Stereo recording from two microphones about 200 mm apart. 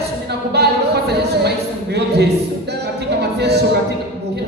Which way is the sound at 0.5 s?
55° right (ahead or behind).